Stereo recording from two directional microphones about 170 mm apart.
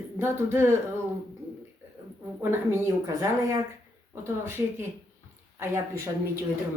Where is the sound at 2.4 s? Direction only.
15° right (ahead or behind).